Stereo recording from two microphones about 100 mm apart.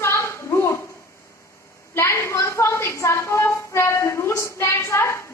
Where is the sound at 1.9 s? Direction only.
25° left (ahead or behind).